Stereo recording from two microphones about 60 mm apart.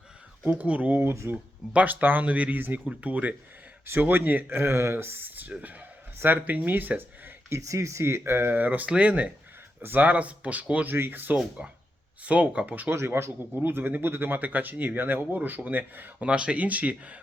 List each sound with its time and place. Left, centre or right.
0.4 s speech: right
7.6 s speech: right
8.5 s speech: right
10.9 s speech: right
11.6 s speech: right
12.9 s speech: right
13.6 s speech: right
16.2 s speech: centre